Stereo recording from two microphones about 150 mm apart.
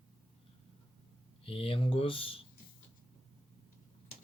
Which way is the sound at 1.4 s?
40° left (ahead or behind).